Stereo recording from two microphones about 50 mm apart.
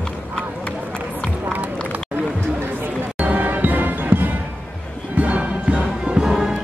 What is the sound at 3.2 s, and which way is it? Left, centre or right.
Music, right.